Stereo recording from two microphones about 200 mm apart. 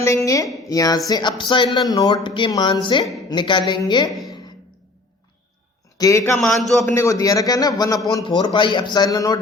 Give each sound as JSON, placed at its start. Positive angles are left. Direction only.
{"t": 0.3, "sound": "a man's voice", "side_deg": 15}
{"t": 6.0, "sound": "a man's voice", "side_deg": 15}
{"t": 6.3, "sound": "speech", "side_deg": 0}
{"t": 6.9, "sound": "a man's voice", "side_deg": 15}